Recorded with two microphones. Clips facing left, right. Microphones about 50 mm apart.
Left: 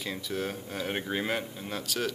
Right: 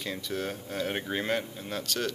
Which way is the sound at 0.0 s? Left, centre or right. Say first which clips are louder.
Even; centre.